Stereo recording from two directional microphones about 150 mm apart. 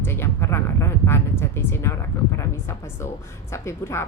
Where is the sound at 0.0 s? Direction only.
15° left (ahead or behind).